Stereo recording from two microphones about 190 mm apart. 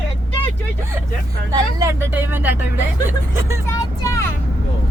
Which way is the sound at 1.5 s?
15° right (ahead or behind).